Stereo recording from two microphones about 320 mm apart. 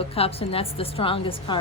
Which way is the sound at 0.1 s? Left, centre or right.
Centre.